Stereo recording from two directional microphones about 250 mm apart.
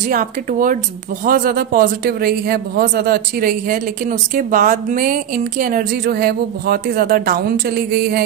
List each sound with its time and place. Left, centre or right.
0.1 s a man's voice: right